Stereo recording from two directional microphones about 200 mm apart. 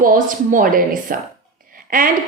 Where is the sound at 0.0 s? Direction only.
45° right (ahead or behind).